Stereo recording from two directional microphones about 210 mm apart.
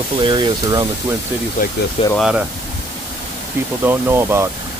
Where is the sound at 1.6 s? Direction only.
40° left (ahead or behind).